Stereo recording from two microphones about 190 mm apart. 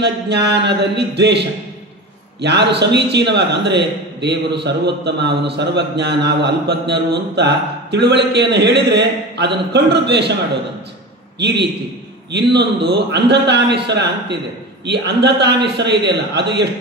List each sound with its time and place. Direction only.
0.0 s a man's voice: 60° right (ahead or behind)
11.3 s a man's voice: 65° right (ahead or behind)